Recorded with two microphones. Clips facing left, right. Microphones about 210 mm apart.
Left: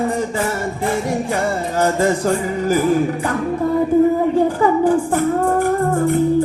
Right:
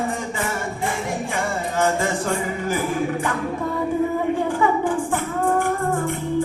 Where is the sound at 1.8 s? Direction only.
40° left (ahead or behind).